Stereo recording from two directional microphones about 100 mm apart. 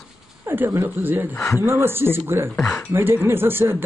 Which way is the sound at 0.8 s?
20° right (ahead or behind).